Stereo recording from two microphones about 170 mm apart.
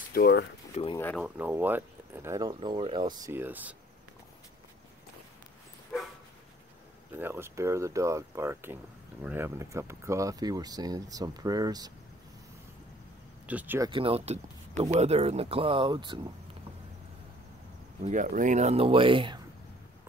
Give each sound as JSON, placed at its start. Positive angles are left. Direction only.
{"t": 0.1, "sound": "speech", "side_deg": 70}
{"t": 0.8, "sound": "speech", "side_deg": 35}
{"t": 1.1, "sound": "speech", "side_deg": -5}
{"t": 7.2, "sound": "speech", "side_deg": -15}
{"t": 13.5, "sound": "speech", "side_deg": -10}
{"t": 13.7, "sound": "speech", "side_deg": -30}
{"t": 18.0, "sound": "speech", "side_deg": -50}